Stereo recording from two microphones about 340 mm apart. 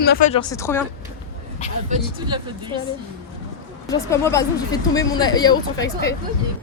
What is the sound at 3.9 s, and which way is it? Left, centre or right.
Speech, centre.